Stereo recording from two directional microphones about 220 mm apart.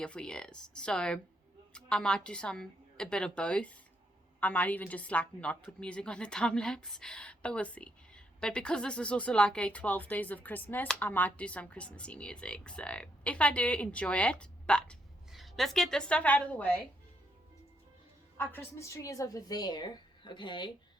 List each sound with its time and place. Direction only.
0.0 s a woman's voice: 5° left (ahead or behind)
18.3 s a woman's voice: 10° left (ahead or behind)